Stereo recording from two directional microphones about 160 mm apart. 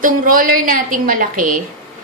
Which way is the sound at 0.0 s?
60° right (ahead or behind).